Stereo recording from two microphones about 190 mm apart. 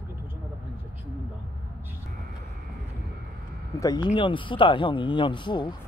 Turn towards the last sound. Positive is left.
turn(degrees=25)  # may be behind; listen again after turning